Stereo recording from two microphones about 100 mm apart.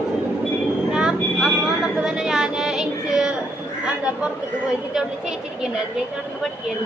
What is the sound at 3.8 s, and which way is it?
Chatter, 10° right (ahead or behind).